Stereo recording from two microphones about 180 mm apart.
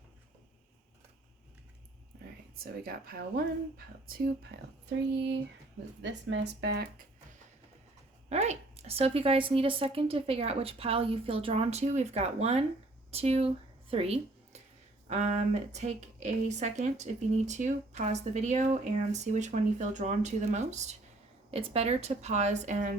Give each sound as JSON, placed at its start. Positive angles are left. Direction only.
{"t": 2.8, "sound": "a woman's voice", "side_deg": -55}
{"t": 6.0, "sound": "speech", "side_deg": -75}
{"t": 8.3, "sound": "speech", "side_deg": -35}
{"t": 13.9, "sound": "a sound", "side_deg": -35}
{"t": 15.0, "sound": "speech", "side_deg": -40}